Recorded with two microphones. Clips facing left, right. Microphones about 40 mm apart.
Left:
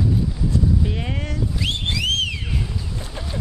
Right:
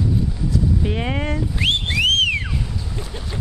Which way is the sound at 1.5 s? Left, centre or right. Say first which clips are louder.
Right 6 dB; right.